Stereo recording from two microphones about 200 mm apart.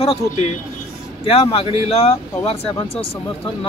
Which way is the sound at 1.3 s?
30° left (ahead or behind).